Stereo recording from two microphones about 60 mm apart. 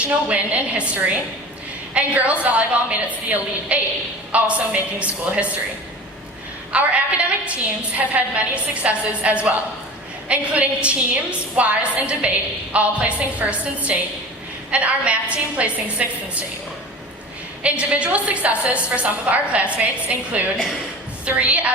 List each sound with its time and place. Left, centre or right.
0.0 s a woman's voice: right
1.9 s a woman's voice: right
6.7 s a woman's voice: right
17.6 s a woman's voice: right